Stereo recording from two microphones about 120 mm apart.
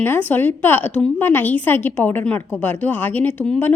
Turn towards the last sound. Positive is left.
turn(degrees=10)  # may be behind; listen again after turning